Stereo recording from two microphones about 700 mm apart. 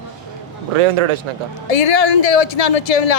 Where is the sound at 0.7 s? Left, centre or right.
Right.